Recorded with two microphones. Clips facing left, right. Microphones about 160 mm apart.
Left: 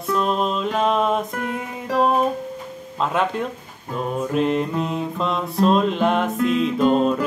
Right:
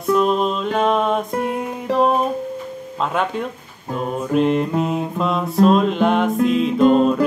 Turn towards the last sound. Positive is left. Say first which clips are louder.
# right 4 dB
turn(degrees=0)  # may be behind; listen again after turning